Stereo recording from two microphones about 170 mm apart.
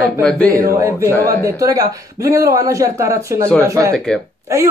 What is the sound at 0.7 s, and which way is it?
Speech, 15° right (ahead or behind).